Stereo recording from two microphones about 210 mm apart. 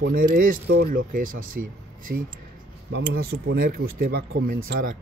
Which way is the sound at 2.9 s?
55° right (ahead or behind).